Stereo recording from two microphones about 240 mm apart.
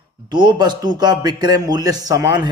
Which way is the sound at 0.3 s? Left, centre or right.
Centre.